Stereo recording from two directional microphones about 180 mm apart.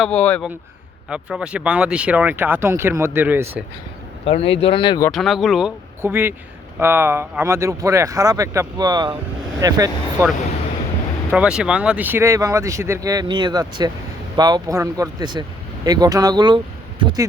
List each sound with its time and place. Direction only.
0.0 s speech: 5° left (ahead or behind)
1.1 s speech: 5° right (ahead or behind)
4.3 s speech: 30° left (ahead or behind)
5.1 s speech: centre (ahead or behind); by 10.2 s 20° right (ahead or behind)
11.3 s speech: 5° right (ahead or behind); by 17.2 s 25° right (ahead or behind)